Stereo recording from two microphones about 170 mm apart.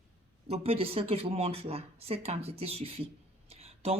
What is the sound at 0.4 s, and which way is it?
Speech, 35° right (ahead or behind).